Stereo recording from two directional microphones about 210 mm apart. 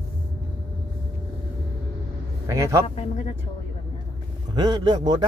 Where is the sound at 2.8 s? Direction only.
30° left (ahead or behind).